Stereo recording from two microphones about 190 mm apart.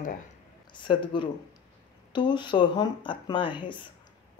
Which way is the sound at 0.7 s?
25° left (ahead or behind).